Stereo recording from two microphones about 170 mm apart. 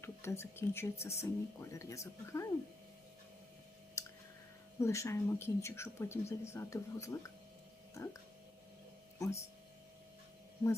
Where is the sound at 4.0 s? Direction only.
15° left (ahead or behind).